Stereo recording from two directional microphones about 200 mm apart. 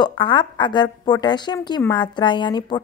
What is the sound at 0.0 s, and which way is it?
A woman's voice, 25° left (ahead or behind).